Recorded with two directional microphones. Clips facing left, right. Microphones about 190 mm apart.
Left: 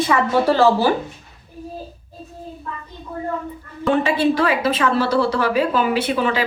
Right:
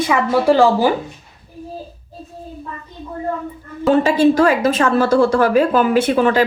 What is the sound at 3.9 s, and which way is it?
A woman's voice, 45° right (ahead or behind).